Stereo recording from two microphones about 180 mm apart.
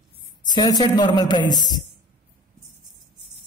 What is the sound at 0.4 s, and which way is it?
Speech, 25° left (ahead or behind).